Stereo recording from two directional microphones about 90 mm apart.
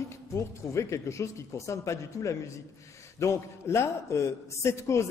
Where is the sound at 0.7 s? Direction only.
35° left (ahead or behind).